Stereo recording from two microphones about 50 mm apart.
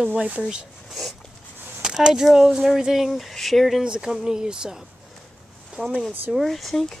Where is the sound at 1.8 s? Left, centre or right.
Centre.